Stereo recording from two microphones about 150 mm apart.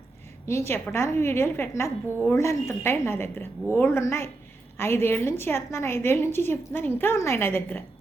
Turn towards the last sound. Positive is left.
turn(degrees=15)  # may be behind; listen again after turning